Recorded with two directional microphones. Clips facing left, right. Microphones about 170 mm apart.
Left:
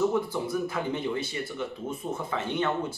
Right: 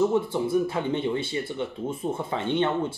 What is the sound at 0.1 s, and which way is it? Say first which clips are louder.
Speech: right 5 dB; 25° right (ahead or behind).